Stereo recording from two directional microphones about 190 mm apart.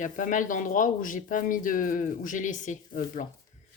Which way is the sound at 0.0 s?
40° left (ahead or behind).